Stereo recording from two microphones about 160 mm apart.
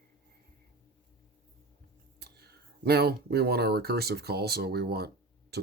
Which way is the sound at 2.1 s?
90° right.